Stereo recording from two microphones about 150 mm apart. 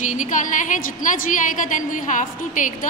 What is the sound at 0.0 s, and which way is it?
A woman's voice, 55° left (ahead or behind).